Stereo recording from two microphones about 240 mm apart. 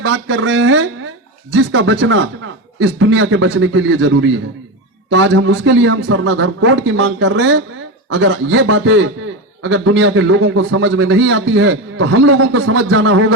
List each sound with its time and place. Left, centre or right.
0.0 s a man's voice: right